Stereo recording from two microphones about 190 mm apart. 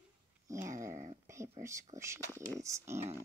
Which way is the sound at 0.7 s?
40° right (ahead or behind).